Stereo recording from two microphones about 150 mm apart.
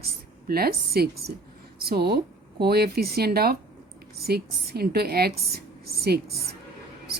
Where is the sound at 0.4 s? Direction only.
90° right.